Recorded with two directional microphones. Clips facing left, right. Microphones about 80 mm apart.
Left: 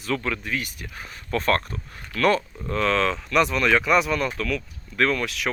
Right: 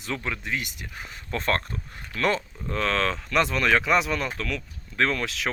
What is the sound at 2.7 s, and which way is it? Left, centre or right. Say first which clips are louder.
Speech: left 3 dB; right.